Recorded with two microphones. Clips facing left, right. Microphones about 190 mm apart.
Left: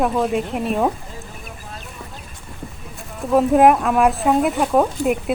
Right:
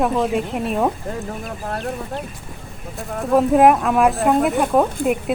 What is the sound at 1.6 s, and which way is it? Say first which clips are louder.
Speech: right 11 dB; 65° right (ahead or behind).